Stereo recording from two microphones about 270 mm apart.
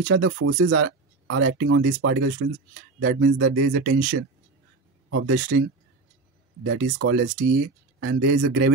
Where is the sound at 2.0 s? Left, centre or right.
Right.